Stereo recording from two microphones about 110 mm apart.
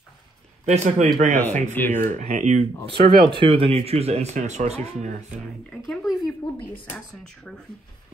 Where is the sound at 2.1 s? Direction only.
90° right.